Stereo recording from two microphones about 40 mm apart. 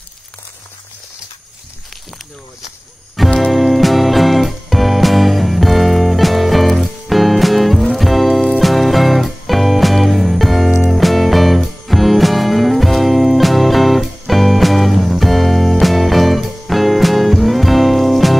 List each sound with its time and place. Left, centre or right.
3.2 s music: centre